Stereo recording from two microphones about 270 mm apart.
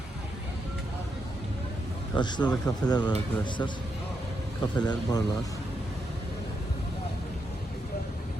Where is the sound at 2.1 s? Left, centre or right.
Centre.